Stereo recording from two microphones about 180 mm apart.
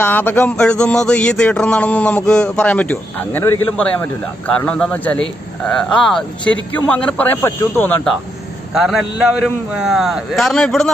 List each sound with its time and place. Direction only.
0.0 s speech: 10° left (ahead or behind)
8.7 s a man's voice: centre (ahead or behind)